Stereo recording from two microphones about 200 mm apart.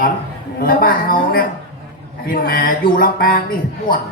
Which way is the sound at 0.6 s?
45° left (ahead or behind).